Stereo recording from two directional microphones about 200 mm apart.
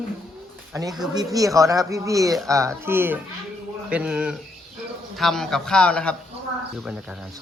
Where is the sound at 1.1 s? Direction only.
15° right (ahead or behind); by 6.2 s 5° left (ahead or behind).